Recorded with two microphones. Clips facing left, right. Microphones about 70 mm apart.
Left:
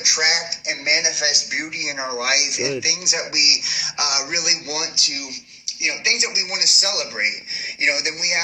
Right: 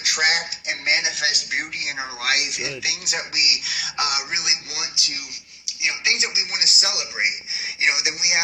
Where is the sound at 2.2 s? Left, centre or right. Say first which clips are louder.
Left 1 dB; right.